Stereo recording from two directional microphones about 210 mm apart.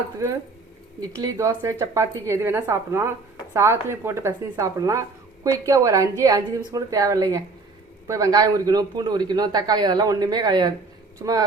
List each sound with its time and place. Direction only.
1.2 s a man's voice: 15° right (ahead or behind)